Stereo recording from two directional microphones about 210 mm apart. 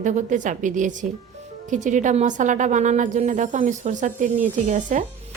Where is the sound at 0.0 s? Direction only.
35° right (ahead or behind).